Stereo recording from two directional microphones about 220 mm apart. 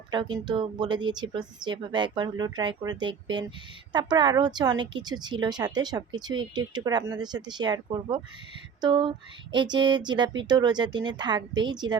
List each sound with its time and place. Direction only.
0.1 s speech: 20° right (ahead or behind)